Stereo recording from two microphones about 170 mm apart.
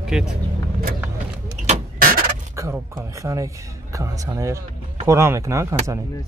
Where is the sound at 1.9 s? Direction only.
55° right (ahead or behind).